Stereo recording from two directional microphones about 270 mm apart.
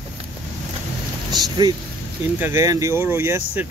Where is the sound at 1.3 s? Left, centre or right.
Centre.